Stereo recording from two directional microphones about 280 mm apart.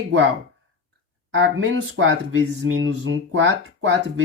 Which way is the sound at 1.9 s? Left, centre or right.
Right.